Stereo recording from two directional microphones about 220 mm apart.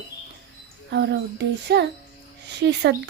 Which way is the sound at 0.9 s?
50° right (ahead or behind).